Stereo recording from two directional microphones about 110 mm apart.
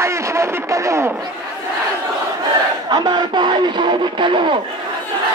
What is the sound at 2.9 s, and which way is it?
Music, 40° right (ahead or behind).